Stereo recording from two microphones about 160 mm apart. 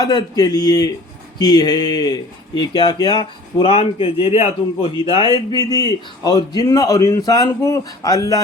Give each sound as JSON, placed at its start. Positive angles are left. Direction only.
{"t": 0.0, "sound": "speech", "side_deg": 25}
{"t": 5.5, "sound": "speech", "side_deg": 25}